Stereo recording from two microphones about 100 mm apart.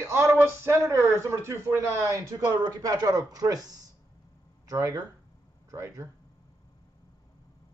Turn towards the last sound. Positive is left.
turn(degrees=-30)  # may be behind; listen again after turning